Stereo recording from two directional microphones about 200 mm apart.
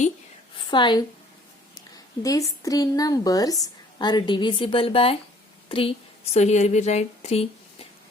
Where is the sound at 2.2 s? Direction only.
15° left (ahead or behind).